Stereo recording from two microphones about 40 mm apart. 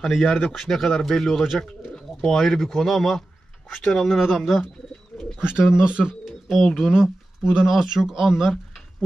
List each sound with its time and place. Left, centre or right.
0.0 s speech: centre
5.4 s speech: centre
5.9 s speech: right
6.2 s speech: centre
6.9 s speech: centre